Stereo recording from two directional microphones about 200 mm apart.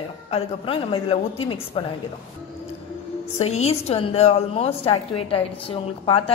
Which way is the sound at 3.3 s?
30° left (ahead or behind).